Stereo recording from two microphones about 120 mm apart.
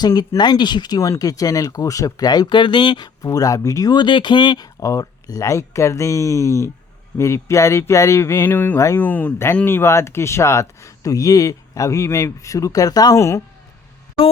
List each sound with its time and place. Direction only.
0.0 s speech: 35° left (ahead or behind)